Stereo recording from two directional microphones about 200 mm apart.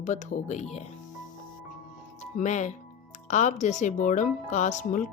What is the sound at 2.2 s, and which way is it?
A woman's voice, 35° left (ahead or behind).